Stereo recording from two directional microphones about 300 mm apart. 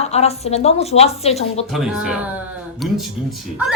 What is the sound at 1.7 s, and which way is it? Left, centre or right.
A man's voice, centre.